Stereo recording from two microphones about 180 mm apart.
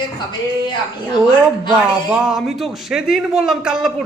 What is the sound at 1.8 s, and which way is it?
A man's voice, 5° right (ahead or behind).